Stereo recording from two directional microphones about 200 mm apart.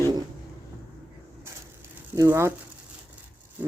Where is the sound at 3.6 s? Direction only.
10° right (ahead or behind).